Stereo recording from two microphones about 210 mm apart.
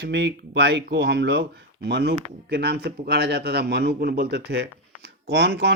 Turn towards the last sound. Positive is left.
turn(degrees=-55)  # may be behind; listen again after turning